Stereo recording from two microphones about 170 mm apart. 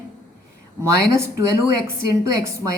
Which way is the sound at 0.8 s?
15° right (ahead or behind).